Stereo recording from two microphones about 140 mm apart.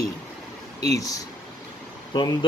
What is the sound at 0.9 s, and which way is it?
Speech, 25° left (ahead or behind).